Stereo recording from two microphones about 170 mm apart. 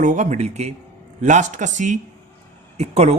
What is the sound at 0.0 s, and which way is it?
Speech, 45° right (ahead or behind).